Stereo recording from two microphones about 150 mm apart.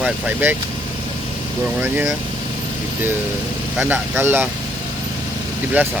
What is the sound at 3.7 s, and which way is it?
Speech, 10° right (ahead or behind).